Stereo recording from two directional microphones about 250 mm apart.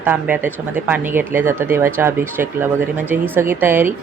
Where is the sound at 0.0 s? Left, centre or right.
Centre.